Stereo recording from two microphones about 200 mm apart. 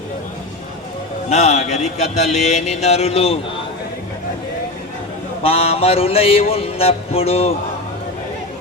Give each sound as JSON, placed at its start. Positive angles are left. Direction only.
{"t": 1.3, "sound": "speech", "side_deg": 35}
{"t": 5.4, "sound": "music", "side_deg": 30}